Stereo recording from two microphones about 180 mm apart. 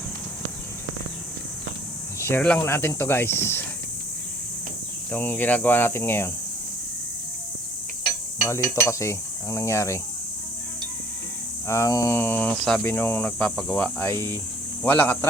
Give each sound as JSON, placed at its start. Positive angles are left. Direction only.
{"t": 2.1, "sound": "speech", "side_deg": 15}
{"t": 5.1, "sound": "speech", "side_deg": 10}
{"t": 8.4, "sound": "speech", "side_deg": 15}
{"t": 11.7, "sound": "speech", "side_deg": 15}